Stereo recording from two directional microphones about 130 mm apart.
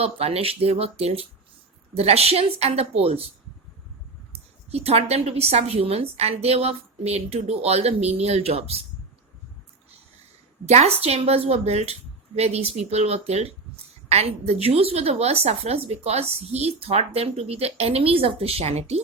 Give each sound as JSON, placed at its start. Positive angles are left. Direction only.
{"t": 0.0, "sound": "speech", "side_deg": -50}
{"t": 4.7, "sound": "speech", "side_deg": -50}
{"t": 10.7, "sound": "speech", "side_deg": -55}